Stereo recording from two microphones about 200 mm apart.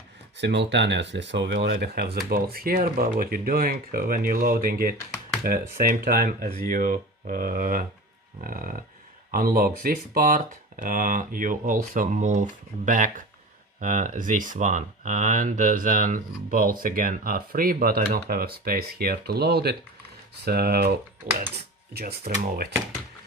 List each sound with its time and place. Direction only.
0.3 s speech: 60° right (ahead or behind)
21.9 s speech: 50° right (ahead or behind)